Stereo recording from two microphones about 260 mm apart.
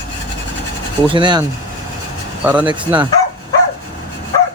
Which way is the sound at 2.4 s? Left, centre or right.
Centre.